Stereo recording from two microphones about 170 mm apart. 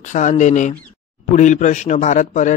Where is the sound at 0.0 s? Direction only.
45° left (ahead or behind).